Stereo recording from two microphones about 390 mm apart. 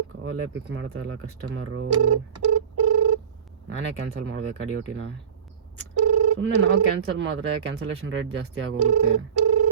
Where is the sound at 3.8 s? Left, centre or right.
Right.